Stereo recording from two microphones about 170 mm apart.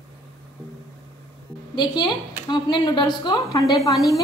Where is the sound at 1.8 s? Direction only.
25° left (ahead or behind).